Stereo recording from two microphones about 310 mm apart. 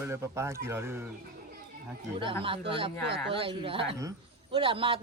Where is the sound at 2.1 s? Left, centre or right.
Centre.